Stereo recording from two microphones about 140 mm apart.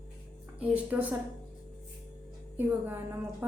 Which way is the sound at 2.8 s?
15° right (ahead or behind).